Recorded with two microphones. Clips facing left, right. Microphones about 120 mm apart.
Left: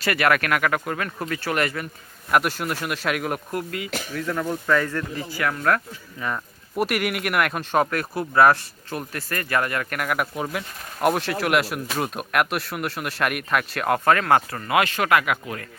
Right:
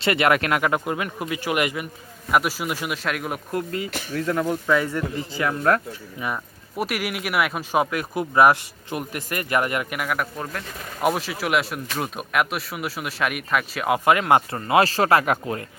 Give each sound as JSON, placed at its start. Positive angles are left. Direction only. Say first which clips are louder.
{"t": 0.0, "sound": "speech", "louder": "right 1 dB", "side_deg": -20}
{"t": 2.3, "sound": "speech", "louder": "even", "side_deg": -5}
{"t": 3.5, "sound": "speech", "louder": "right 2 dB", "side_deg": -35}
{"t": 4.3, "sound": "speech", "louder": "right 1 dB", "side_deg": -15}
{"t": 6.1, "sound": "speech", "louder": "even", "side_deg": -10}
{"t": 6.7, "sound": "speech", "louder": "left 3 dB", "side_deg": 0}
{"t": 9.9, "sound": "speech", "louder": "left 1 dB", "side_deg": -5}
{"t": 10.2, "sound": "speech", "louder": "left 2 dB", "side_deg": 10}